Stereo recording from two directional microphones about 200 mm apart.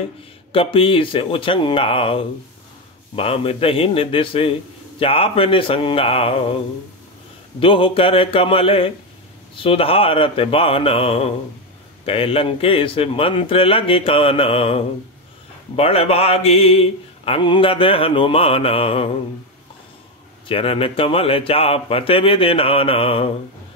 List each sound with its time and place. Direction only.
0.5 s a man's voice: 25° left (ahead or behind)
7.6 s a man's voice: 25° left (ahead or behind)
20.4 s a man's voice: 30° left (ahead or behind)